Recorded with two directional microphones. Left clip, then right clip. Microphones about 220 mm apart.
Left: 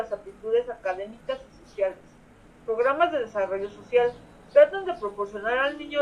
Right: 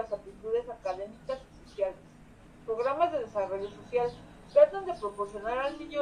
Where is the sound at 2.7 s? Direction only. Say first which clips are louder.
Left 6 dB; 35° left (ahead or behind).